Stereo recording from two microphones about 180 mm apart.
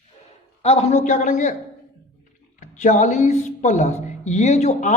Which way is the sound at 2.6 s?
45° left (ahead or behind).